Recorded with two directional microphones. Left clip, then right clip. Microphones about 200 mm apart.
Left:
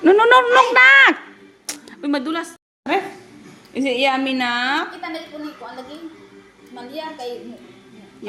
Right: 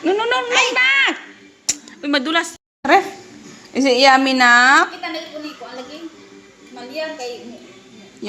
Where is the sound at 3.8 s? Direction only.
20° right (ahead or behind).